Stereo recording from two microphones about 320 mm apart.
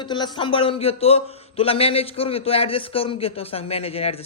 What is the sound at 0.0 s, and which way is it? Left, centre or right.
A man's voice, centre.